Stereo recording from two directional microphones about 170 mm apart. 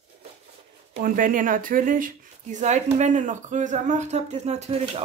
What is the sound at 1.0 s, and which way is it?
Speech, 50° right (ahead or behind).